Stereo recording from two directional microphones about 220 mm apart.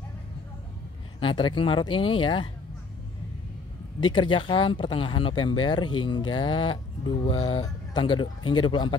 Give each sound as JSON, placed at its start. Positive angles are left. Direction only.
{"t": 1.2, "sound": "speech", "side_deg": 20}
{"t": 4.0, "sound": "speech", "side_deg": 20}